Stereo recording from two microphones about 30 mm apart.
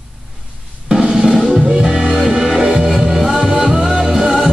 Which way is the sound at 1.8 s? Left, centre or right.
Centre.